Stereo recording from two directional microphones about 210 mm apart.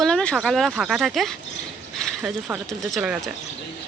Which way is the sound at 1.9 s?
Centre (ahead or behind).